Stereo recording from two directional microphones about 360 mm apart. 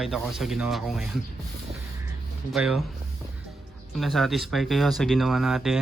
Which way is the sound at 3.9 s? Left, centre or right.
Centre.